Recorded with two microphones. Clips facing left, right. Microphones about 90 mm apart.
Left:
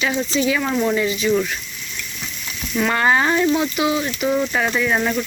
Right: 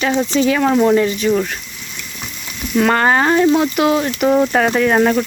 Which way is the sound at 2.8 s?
45° right (ahead or behind).